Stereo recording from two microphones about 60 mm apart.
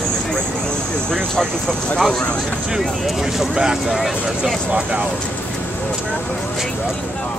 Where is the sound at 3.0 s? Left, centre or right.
Centre.